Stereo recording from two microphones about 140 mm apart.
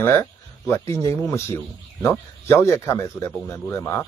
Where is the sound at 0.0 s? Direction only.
20° left (ahead or behind).